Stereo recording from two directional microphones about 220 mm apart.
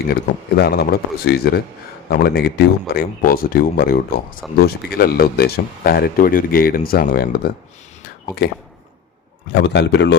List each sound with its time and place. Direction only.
0.1 s speech: 45° left (ahead or behind)
9.6 s speech: 50° left (ahead or behind)